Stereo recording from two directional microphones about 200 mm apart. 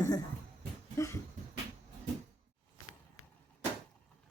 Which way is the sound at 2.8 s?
90° left.